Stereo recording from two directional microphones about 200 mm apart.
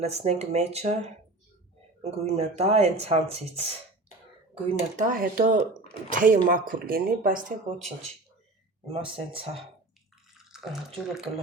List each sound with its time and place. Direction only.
0.0 s speech: 35° right (ahead or behind)
4.9 s speech: 45° right (ahead or behind)
9.0 s speech: 25° right (ahead or behind)
10.5 s speech: centre (ahead or behind)